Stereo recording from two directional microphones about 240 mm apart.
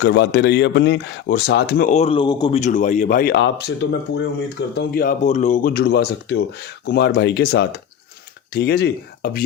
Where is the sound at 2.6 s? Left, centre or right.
Left.